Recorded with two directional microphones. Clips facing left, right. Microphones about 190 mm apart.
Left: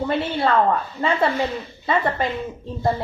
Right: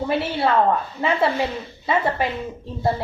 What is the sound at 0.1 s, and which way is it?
A woman's voice, 5° right (ahead or behind).